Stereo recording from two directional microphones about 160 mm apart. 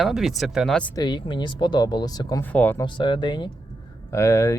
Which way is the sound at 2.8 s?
30° left (ahead or behind).